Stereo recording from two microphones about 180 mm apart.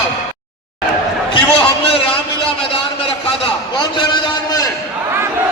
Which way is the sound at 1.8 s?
30° left (ahead or behind).